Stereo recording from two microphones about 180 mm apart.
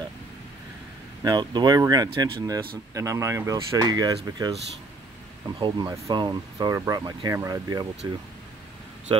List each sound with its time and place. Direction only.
1.2 s speech: 20° right (ahead or behind)
5.6 s speech: 20° right (ahead or behind)